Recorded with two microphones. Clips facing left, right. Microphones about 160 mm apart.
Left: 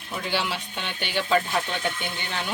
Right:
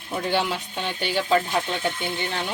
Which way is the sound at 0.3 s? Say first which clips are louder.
Right 1 dB; 40° right (ahead or behind).